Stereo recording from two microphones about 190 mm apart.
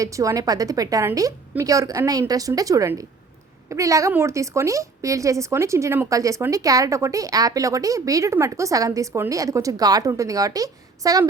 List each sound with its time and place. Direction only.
0.0 s a woman's voice: 15° right (ahead or behind)